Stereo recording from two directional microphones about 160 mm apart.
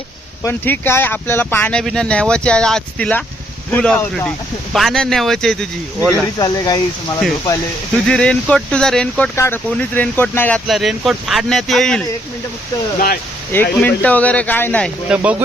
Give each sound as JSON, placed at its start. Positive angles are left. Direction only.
{"t": 0.4, "sound": "speech", "side_deg": 15}
{"t": 6.1, "sound": "speech", "side_deg": 25}
{"t": 8.0, "sound": "speech", "side_deg": 5}
{"t": 10.7, "sound": "speech", "side_deg": 0}
{"t": 13.5, "sound": "speech", "side_deg": 10}
{"t": 15.1, "sound": "speech", "side_deg": -10}